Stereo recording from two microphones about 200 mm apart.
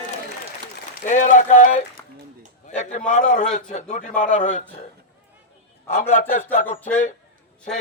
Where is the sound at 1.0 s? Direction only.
40° left (ahead or behind).